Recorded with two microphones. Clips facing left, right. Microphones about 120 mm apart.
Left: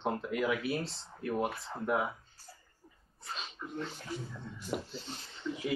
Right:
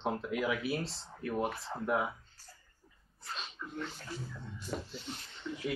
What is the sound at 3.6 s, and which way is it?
Speech, 25° left (ahead or behind).